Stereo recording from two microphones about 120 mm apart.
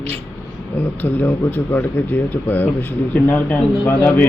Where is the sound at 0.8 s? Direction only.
15° left (ahead or behind).